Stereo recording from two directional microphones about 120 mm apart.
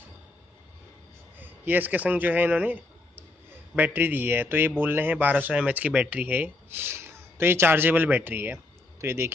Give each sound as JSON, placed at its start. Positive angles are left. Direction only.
{"t": 1.4, "sound": "speech", "side_deg": -15}